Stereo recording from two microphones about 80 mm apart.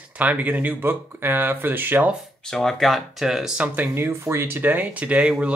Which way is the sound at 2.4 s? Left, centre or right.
Centre.